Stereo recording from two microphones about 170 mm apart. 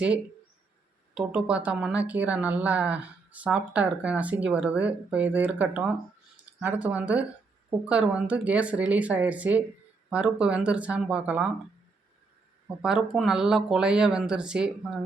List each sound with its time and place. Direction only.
1.1 s speech: 5° right (ahead or behind)
12.6 s speech: 5° right (ahead or behind)